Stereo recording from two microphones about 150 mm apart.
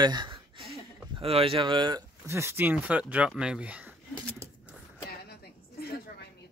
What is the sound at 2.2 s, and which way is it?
Speech, 15° right (ahead or behind).